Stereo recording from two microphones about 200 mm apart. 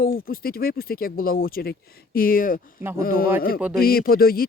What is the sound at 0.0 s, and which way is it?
Speech, 45° left (ahead or behind).